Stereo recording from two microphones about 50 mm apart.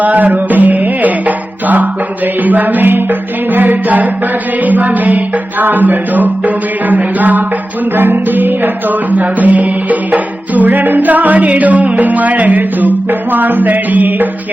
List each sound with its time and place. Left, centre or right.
0.0 s music: right